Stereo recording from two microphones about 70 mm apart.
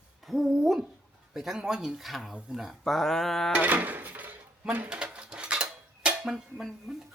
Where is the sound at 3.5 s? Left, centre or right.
Right.